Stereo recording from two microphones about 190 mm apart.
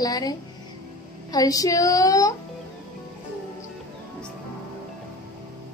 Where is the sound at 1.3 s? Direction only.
20° left (ahead or behind).